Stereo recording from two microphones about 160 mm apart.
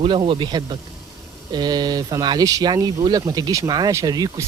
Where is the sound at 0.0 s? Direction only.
35° right (ahead or behind).